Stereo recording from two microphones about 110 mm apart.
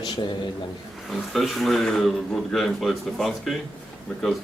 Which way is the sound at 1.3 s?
Centre (ahead or behind).